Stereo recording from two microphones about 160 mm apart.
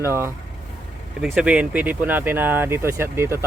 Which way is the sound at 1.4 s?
10° right (ahead or behind).